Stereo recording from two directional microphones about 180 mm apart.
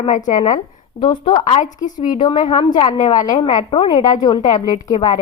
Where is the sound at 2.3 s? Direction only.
45° left (ahead or behind).